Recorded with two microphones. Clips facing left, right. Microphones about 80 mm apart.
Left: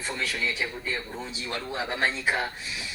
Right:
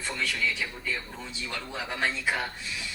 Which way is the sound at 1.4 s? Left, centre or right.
Left.